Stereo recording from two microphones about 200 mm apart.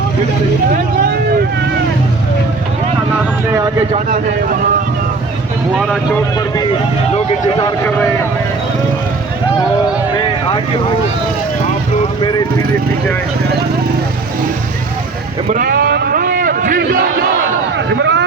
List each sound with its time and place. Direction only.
3.9 s speech: 40° right (ahead or behind)
7.6 s speech: 10° left (ahead or behind)
15.4 s a sound: 45° right (ahead or behind)
17.9 s vehicle: 65° right (ahead or behind)